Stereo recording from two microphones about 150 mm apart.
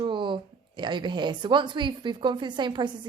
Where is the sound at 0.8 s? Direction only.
30° right (ahead or behind).